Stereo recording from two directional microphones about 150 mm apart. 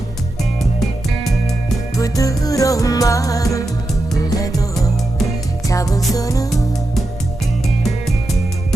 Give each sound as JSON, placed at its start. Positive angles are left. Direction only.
{"t": 2.0, "sound": "music", "side_deg": 25}
{"t": 5.6, "sound": "music", "side_deg": 25}